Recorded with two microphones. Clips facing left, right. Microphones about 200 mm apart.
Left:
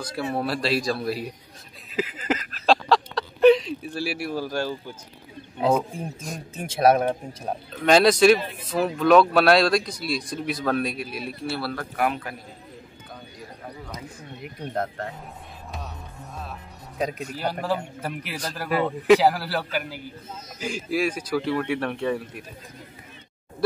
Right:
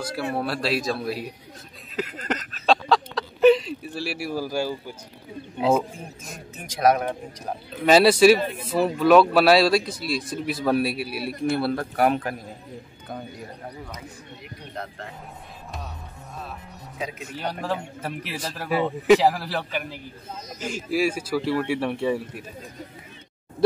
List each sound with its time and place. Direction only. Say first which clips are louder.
0.0 s speech: even; centre (ahead or behind)
2.0 s a sound: left 2 dB; centre (ahead or behind)
6.5 s speech: left 2 dB; 25° left (ahead or behind)
7.7 s speech: right 1 dB; 5° right (ahead or behind); by 11.9 s 25° right (ahead or behind)
12.0 s a man's voice: right 4 dB; 45° right (ahead or behind)
14.7 s speech: left 7 dB; 50° left (ahead or behind)
17.4 s speech: left 1 dB; 5° left (ahead or behind)